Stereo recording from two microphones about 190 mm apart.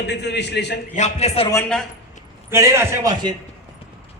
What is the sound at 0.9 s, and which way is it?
Speech, 35° left (ahead or behind).